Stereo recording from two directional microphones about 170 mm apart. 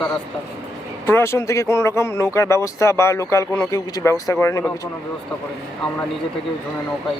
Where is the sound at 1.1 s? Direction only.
15° left (ahead or behind).